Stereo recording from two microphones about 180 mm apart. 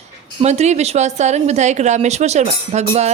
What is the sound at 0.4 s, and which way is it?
Speech, 40° right (ahead or behind).